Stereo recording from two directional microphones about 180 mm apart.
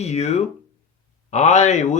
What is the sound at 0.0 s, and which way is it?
Speech, 40° left (ahead or behind).